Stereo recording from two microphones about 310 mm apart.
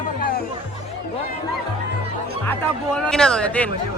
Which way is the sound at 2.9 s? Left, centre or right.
Centre.